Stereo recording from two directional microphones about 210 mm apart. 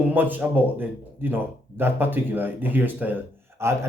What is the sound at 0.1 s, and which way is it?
Speech, 10° right (ahead or behind).